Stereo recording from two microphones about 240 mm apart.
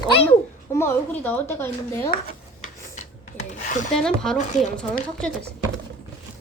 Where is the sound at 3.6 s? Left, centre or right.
Left.